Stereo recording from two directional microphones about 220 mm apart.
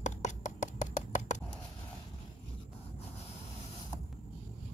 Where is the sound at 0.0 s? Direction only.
35° left (ahead or behind).